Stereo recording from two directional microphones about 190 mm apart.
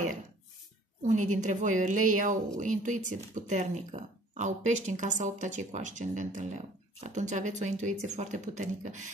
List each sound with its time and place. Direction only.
1.0 s a woman's voice: 40° right (ahead or behind)